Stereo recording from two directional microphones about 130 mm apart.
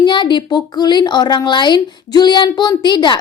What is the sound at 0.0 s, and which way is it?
A woman's voice, 35° left (ahead or behind).